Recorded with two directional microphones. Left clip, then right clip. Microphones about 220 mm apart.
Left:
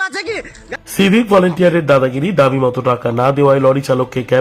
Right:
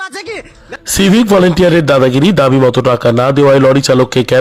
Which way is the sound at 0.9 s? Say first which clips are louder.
Right 2 dB; 30° right (ahead or behind).